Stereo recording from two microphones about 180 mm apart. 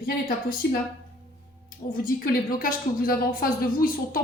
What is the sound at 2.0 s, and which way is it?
A woman's voice, 50° left (ahead or behind).